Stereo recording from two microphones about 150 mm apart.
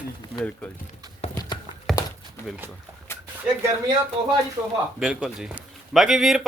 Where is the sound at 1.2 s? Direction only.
45° left (ahead or behind).